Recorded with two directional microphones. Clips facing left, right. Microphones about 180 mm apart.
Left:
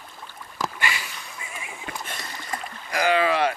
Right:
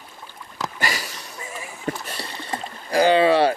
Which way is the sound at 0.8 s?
40° right (ahead or behind).